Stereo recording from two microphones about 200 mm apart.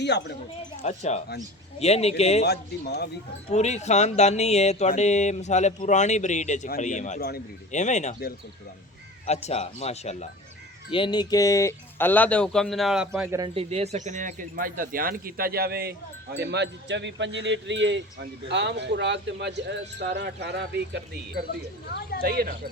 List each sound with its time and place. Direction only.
0.0 s speech: 60° left (ahead or behind)
0.8 s speech: 35° left (ahead or behind)
2.4 s speech: 55° left (ahead or behind)
3.5 s speech: 35° left (ahead or behind)
7.8 s speech: 35° left (ahead or behind)
10.9 s speech: 25° left (ahead or behind); by 13.3 s 5° right (ahead or behind)
13.3 s speech: 25° right (ahead or behind); by 21.0 s 55° right (ahead or behind)
22.2 s speech: 50° right (ahead or behind)